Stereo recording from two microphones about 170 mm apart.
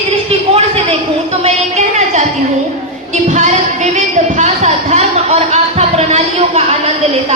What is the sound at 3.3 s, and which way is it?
A woman's voice, 45° right (ahead or behind).